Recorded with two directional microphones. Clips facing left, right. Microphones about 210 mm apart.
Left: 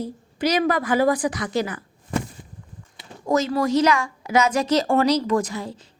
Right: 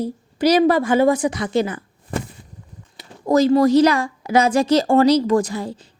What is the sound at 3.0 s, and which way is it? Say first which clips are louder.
A woman's voice: right 6 dB; 35° right (ahead or behind).